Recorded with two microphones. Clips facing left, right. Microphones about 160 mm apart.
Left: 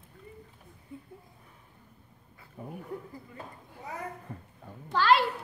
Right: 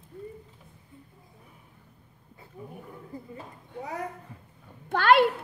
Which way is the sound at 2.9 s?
70° left (ahead or behind).